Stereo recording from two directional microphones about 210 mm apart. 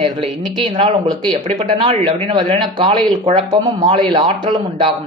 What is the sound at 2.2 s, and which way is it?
Speech, 30° right (ahead or behind).